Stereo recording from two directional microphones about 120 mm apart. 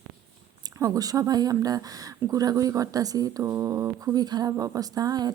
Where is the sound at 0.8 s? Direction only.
30° right (ahead or behind).